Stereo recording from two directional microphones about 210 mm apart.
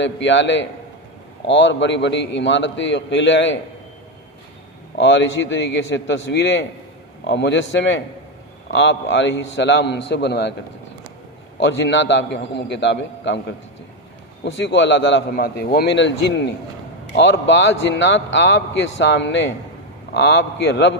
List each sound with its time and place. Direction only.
0.0 s a man's voice: 60° left (ahead or behind)
4.9 s a man's voice: 60° left (ahead or behind)
11.6 s a man's voice: 60° left (ahead or behind)
14.4 s a man's voice: 55° left (ahead or behind)